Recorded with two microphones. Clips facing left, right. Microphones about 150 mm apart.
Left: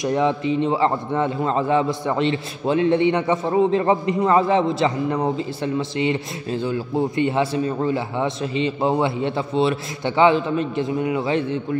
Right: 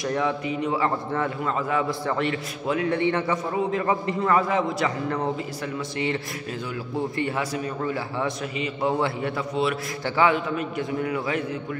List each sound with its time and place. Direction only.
0.0 s a man's voice: 20° left (ahead or behind)